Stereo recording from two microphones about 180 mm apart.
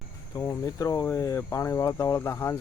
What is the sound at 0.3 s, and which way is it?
Speech, 20° left (ahead or behind).